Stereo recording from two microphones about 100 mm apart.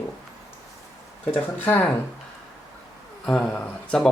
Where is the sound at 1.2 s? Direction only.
15° left (ahead or behind).